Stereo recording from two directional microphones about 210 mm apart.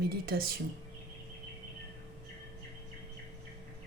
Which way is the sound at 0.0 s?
45° right (ahead or behind).